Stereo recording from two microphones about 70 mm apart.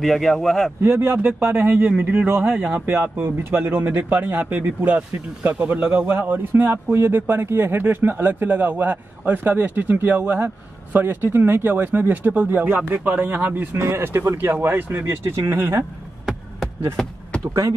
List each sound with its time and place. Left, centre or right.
0.0 s speech: centre
0.8 s a man's voice: right
13.7 s speech: right
16.9 s a sound: centre